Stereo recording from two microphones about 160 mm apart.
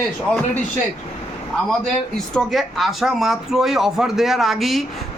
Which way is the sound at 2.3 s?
Centre (ahead or behind).